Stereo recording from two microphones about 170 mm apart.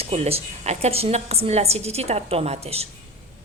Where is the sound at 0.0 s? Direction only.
35° right (ahead or behind).